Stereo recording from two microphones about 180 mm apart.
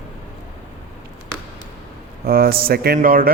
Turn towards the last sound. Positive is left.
turn(degrees=-50)  # may be behind; listen again after turning